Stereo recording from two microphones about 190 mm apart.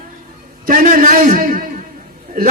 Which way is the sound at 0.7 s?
45° right (ahead or behind).